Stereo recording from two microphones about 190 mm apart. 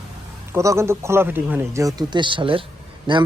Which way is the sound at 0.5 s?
15° right (ahead or behind).